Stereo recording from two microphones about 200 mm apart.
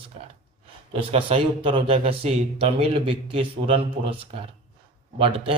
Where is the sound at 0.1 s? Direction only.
30° right (ahead or behind).